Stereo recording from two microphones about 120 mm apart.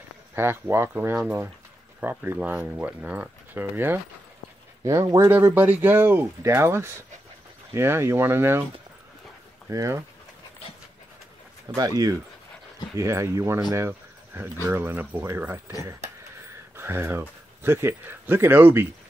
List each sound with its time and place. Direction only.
0.4 s speech: 20° right (ahead or behind)
4.8 s speech: 30° right (ahead or behind)
5.3 s speech: 15° right (ahead or behind)
9.7 s speech: 25° right (ahead or behind)
11.7 s speech: 35° right (ahead or behind)
12.9 s speech: 25° right (ahead or behind)